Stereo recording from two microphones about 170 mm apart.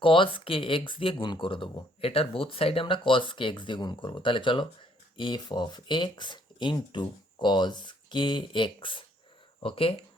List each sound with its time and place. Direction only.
0.0 s speech: 30° left (ahead or behind)